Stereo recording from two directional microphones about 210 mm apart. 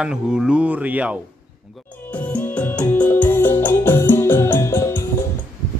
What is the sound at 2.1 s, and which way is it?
Music, 5° left (ahead or behind).